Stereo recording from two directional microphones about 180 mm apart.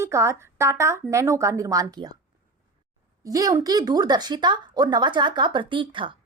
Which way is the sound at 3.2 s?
20° right (ahead or behind).